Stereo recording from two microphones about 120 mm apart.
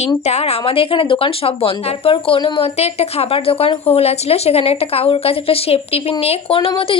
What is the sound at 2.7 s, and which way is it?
A woman's voice, 60° left (ahead or behind).